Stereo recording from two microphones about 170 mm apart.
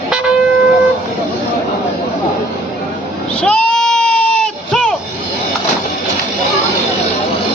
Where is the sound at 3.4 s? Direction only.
5° left (ahead or behind).